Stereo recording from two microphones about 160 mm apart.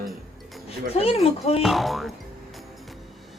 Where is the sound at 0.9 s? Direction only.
40° left (ahead or behind).